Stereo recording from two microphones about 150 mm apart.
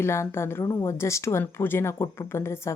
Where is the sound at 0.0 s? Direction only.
15° left (ahead or behind).